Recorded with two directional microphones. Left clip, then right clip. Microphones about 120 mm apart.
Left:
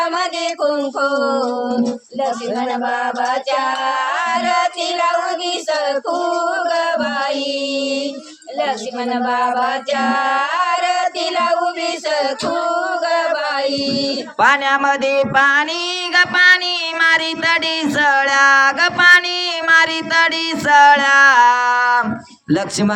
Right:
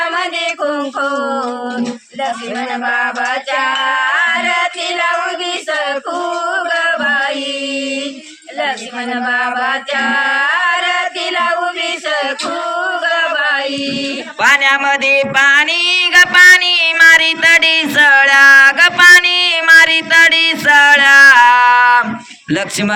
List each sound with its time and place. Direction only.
1.0 s a sound: 30° left (ahead or behind)
6.7 s chant: 90° left
9.6 s singing: 80° left
14.3 s music: 60° left (ahead or behind); by 22.0 s 40° left (ahead or behind)
22.4 s speech: 45° left (ahead or behind)